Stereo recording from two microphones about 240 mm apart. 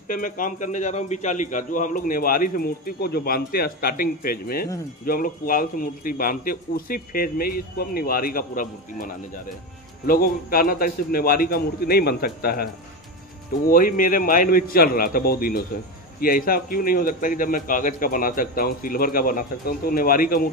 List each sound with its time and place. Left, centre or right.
0.1 s a man's voice: left
13.7 s a man's voice: left